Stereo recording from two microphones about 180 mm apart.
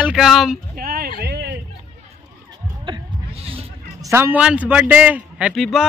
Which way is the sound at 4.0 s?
15° right (ahead or behind).